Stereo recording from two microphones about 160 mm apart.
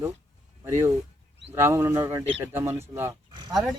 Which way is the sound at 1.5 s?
15° right (ahead or behind).